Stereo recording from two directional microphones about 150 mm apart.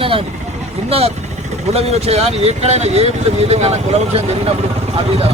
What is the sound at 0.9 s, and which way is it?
A man's voice, 40° right (ahead or behind).